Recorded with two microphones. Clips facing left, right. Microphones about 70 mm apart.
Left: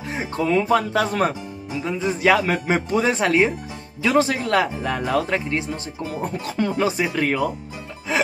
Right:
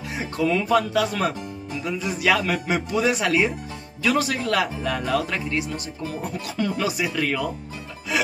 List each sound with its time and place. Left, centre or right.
0.1 s speech: left
8.1 s music: left